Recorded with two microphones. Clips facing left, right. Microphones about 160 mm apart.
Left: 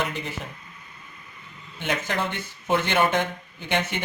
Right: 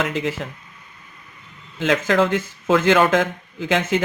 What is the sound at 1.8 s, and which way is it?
Speech, 90° right.